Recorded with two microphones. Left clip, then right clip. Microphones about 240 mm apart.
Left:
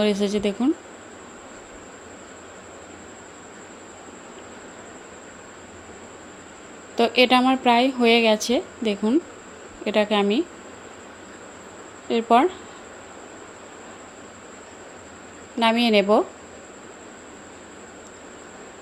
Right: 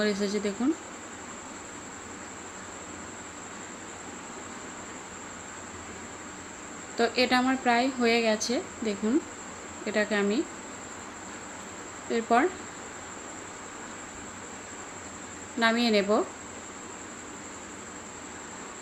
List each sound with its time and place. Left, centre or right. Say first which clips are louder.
0.0 s speech: left 6 dB; left
7.2 s speech: left 9 dB; left
12.1 s speech: left 7 dB; left
15.5 s speech: left 6 dB; left